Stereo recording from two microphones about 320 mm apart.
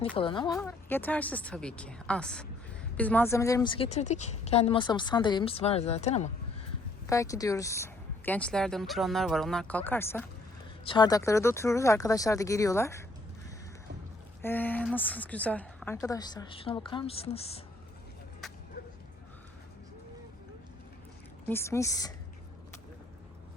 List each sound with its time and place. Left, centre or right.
0.2 s a woman's voice: centre
7.1 s a woman's voice: centre
14.4 s a woman's voice: centre
18.4 s vehicle: centre
21.4 s a woman's voice: centre